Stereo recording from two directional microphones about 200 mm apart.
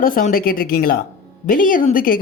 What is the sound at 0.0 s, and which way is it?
A woman's voice, 45° left (ahead or behind).